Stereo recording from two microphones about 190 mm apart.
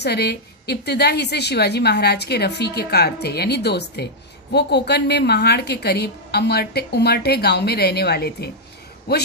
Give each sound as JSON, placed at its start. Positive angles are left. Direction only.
{"t": 0.0, "sound": "a woman's voice", "side_deg": 60}